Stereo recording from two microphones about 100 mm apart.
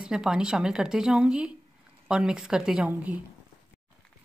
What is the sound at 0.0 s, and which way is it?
Speech, 10° right (ahead or behind).